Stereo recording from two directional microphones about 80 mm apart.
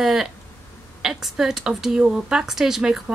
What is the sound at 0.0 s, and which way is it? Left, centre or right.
Speech, centre.